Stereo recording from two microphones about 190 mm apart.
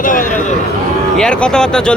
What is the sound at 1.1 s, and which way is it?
Speech, 5° left (ahead or behind).